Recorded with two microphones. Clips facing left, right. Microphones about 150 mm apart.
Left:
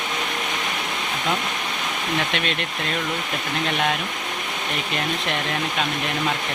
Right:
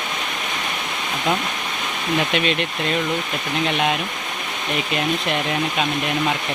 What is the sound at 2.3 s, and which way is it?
Speech, centre (ahead or behind).